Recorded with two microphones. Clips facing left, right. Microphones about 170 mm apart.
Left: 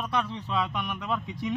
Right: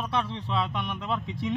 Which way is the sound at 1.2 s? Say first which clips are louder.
Right 1 dB; 30° right (ahead or behind).